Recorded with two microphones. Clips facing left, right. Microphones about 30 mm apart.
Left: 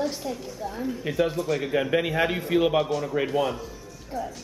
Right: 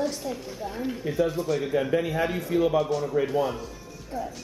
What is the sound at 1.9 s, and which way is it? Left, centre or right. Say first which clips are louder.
Speech: left 2 dB; left.